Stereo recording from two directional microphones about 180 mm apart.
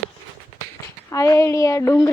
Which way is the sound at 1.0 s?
15° left (ahead or behind).